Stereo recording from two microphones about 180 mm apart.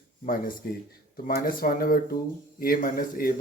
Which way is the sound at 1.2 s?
55° left (ahead or behind).